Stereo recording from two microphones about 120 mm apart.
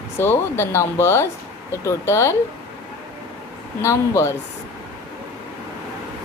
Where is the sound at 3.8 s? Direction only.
25° left (ahead or behind).